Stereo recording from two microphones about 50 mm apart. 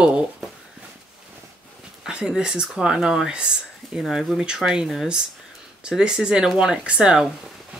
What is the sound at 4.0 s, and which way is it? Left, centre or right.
Speech, centre.